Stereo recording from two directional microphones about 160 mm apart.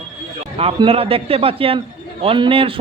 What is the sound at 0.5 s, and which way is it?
A man's voice, 35° right (ahead or behind).